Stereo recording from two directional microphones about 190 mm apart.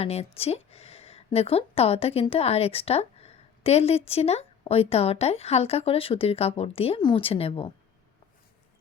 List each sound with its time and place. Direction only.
0.0 s a woman's voice: 35° left (ahead or behind)